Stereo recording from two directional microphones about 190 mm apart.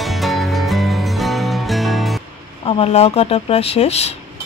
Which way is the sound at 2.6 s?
30° left (ahead or behind).